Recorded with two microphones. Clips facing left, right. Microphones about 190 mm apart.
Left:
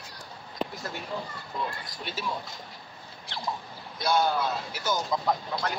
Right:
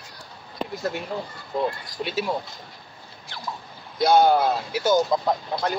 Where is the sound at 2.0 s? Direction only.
70° right (ahead or behind).